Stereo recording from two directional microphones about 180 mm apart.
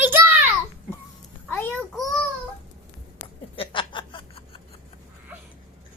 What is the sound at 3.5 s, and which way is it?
Snicker, 30° left (ahead or behind).